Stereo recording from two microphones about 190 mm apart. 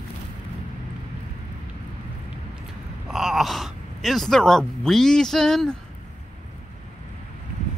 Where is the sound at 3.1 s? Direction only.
Centre (ahead or behind).